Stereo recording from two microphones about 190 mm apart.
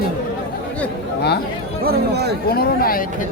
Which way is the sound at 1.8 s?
55° right (ahead or behind).